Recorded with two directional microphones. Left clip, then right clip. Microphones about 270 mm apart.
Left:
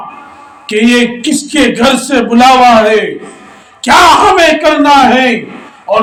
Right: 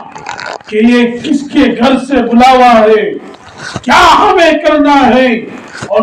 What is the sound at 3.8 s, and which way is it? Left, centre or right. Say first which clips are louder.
Speech: left 1 dB; left.